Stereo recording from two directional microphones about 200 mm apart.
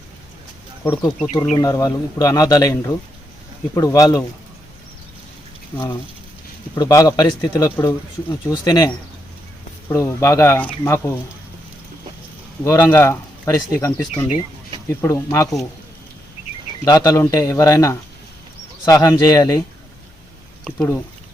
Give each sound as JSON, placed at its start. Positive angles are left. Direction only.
{"t": 1.5, "sound": "speech", "side_deg": 15}
{"t": 5.7, "sound": "a man's voice", "side_deg": 10}
{"t": 9.9, "sound": "speech", "side_deg": 15}
{"t": 12.6, "sound": "speech", "side_deg": 15}
{"t": 16.8, "sound": "a man's voice", "side_deg": 20}
{"t": 20.7, "sound": "speech", "side_deg": 10}